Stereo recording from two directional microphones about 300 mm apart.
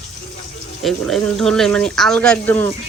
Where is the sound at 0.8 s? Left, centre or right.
Centre.